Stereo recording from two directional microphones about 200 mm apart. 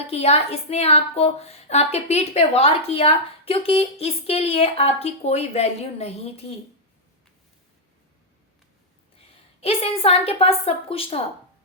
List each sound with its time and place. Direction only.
0.1 s a woman's voice: 30° left (ahead or behind)
9.1 s a woman's voice: 30° left (ahead or behind)